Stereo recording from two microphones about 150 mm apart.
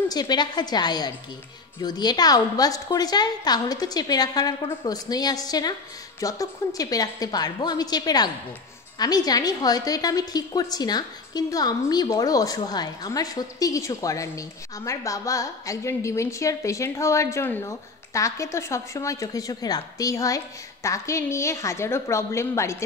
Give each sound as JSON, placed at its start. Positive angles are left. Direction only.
{"t": 0.1, "sound": "a woman's voice", "side_deg": 25}